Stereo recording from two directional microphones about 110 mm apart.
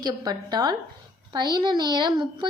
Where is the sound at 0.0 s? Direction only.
40° right (ahead or behind).